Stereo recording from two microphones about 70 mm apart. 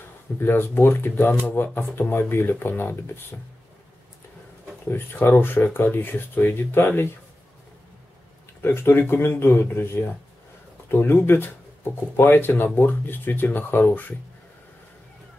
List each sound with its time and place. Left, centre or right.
0.4 s speech: left
5.1 s speech: left
8.6 s speech: left